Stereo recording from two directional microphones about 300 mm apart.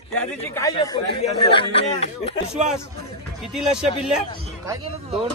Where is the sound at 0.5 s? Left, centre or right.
Centre.